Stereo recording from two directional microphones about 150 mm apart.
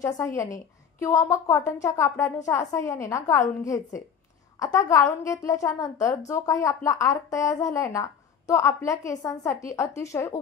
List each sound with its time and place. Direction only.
0.0 s a woman's voice: 20° left (ahead or behind)